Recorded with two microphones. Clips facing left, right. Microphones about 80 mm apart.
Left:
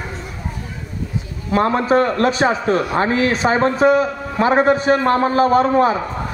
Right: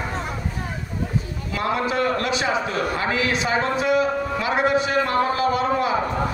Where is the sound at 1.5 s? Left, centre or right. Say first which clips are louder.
Left 8 dB; left.